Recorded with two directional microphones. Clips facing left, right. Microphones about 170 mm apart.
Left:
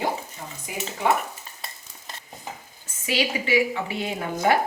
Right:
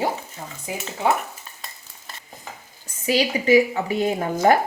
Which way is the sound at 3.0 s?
40° right (ahead or behind).